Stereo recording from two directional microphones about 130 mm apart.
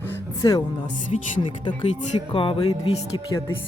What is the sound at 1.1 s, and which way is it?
Speech, 55° left (ahead or behind).